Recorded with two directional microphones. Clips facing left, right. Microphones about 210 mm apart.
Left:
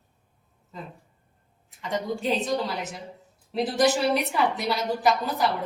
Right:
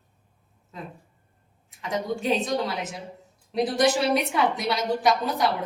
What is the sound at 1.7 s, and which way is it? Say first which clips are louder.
A woman's voice: right 1 dB; centre (ahead or behind).